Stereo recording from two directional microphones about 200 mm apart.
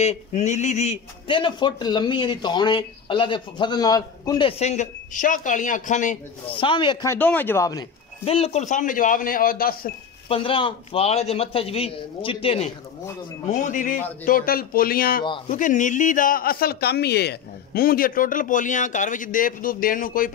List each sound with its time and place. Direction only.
0.0 s a man's voice: 35° left (ahead or behind); by 7.8 s 15° left (ahead or behind)
8.3 s a man's voice: 30° left (ahead or behind); by 9.8 s 45° left (ahead or behind)
10.2 s a man's voice: 25° left (ahead or behind); by 15.2 s 45° left (ahead or behind)
15.2 s a man's voice: 25° left (ahead or behind)
15.5 s speech: 40° left (ahead or behind)